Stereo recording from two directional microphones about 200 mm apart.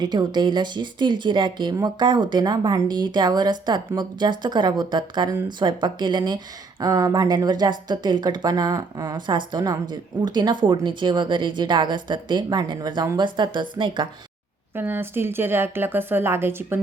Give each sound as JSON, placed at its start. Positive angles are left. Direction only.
{"t": 0.0, "sound": "speech", "side_deg": -20}
{"t": 14.8, "sound": "a woman's voice", "side_deg": -10}